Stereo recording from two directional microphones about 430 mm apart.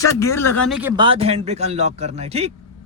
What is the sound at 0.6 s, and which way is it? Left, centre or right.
Speech, centre.